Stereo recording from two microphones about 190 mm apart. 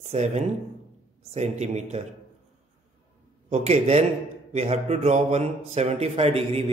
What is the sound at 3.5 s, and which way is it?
Speech, 35° right (ahead or behind).